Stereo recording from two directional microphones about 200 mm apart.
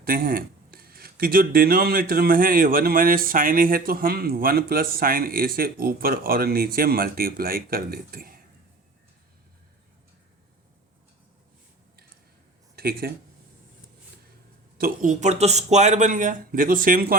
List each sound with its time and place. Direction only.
0.0 s speech: 45° right (ahead or behind)
12.7 s speech: 50° right (ahead or behind)
14.8 s speech: 40° right (ahead or behind)